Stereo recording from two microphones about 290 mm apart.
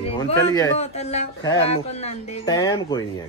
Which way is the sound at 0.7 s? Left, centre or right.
Left.